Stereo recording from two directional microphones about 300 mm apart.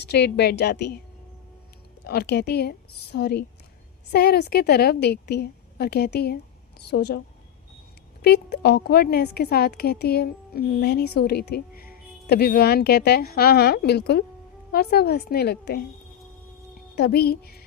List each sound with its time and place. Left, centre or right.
0.1 s a woman's voice: left
2.0 s a woman's voice: left
8.2 s a woman's voice: left
16.9 s a woman's voice: left